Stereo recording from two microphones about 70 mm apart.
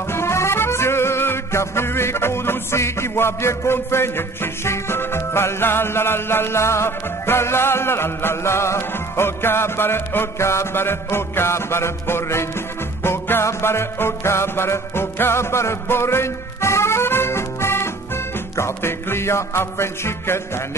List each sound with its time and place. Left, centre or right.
0.1 s music: left